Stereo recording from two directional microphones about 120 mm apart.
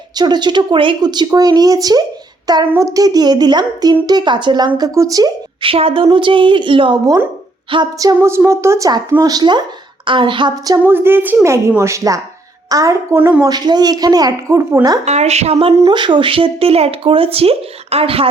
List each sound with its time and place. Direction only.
0.2 s speech: 35° right (ahead or behind)
5.6 s speech: 50° right (ahead or behind)
7.9 s a woman's voice: 25° right (ahead or behind)
10.8 s a woman's voice: 20° right (ahead or behind)
13.1 s speech: 15° right (ahead or behind)
13.4 s speech: 35° right (ahead or behind)
15.0 s a woman's voice: 65° right (ahead or behind)
15.9 s speech: 40° right (ahead or behind)